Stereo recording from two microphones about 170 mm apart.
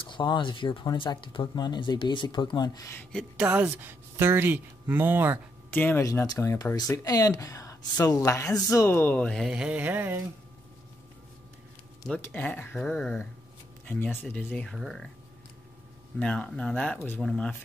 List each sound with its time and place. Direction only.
0.0 s speech: 25° left (ahead or behind); by 3.4 s 5° left (ahead or behind)
3.4 s speech: 10° right (ahead or behind)
5.7 s speech: 10° left (ahead or behind); by 10.2 s 10° right (ahead or behind)
12.1 s speech: 10° left (ahead or behind)
16.2 s speech: 5° left (ahead or behind)